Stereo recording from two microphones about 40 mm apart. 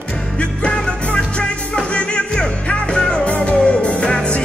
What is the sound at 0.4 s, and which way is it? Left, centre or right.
Music, left.